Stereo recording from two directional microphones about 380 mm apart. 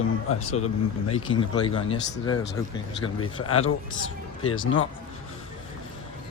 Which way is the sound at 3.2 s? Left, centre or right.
Left.